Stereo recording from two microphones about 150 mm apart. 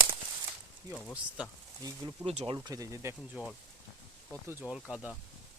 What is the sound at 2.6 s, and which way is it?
Speech, 25° right (ahead or behind).